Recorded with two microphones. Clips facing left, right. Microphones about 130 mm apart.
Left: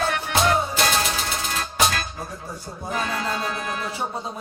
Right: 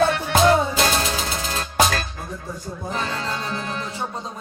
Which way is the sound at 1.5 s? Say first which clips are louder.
Right 3 dB; 35° right (ahead or behind).